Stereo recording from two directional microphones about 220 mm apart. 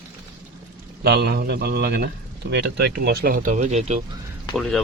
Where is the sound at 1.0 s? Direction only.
50° right (ahead or behind); by 4.0 s 30° right (ahead or behind).